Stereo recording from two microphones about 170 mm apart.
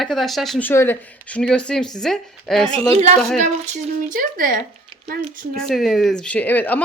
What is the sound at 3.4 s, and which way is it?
Speech, 50° right (ahead or behind).